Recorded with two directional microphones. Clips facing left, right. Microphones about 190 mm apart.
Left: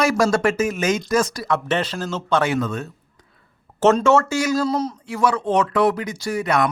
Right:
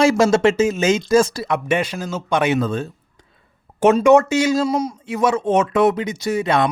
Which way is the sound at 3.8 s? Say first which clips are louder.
Right 3 dB; 15° right (ahead or behind).